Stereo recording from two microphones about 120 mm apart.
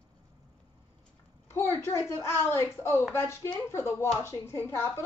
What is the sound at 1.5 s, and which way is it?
A woman's voice, 20° left (ahead or behind).